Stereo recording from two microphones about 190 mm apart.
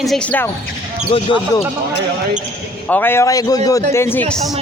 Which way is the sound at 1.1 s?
30° left (ahead or behind).